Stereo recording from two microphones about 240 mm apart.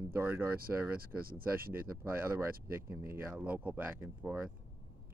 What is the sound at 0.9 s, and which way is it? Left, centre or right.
Speech, right.